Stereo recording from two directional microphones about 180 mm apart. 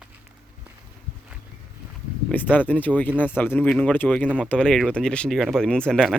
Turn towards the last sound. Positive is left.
turn(degrees=5)  # may be behind; listen again after turning